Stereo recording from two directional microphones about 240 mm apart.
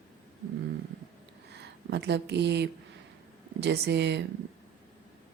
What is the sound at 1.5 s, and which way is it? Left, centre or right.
Speech, right.